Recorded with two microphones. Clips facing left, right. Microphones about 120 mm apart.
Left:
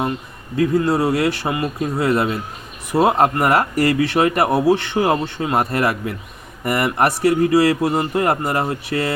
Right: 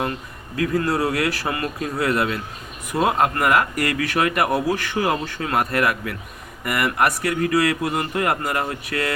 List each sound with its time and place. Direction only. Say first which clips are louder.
0.8 s speech: left 2 dB; 25° left (ahead or behind)